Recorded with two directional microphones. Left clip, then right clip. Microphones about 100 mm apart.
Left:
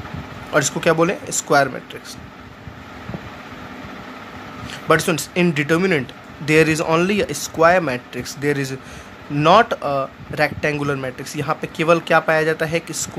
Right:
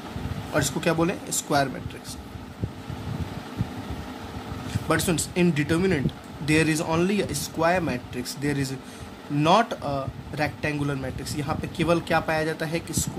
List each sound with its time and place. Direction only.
0.5 s speech: 65° left (ahead or behind)
4.8 s speech: 60° left (ahead or behind)
9.4 s speech: 50° left (ahead or behind)